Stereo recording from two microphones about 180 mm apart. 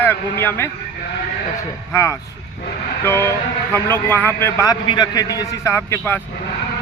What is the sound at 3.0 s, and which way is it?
A man's voice, 15° left (ahead or behind).